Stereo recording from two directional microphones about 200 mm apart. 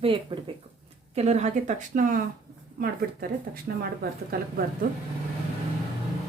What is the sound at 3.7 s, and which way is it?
Speech, 50° right (ahead or behind).